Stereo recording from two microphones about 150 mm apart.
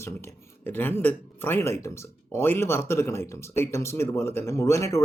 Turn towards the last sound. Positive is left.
turn(degrees=20)  # may be behind; listen again after turning